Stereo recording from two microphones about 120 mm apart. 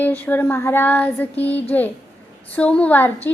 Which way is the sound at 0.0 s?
15° left (ahead or behind).